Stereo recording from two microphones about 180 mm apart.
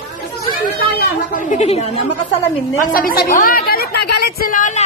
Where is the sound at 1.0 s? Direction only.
45° left (ahead or behind).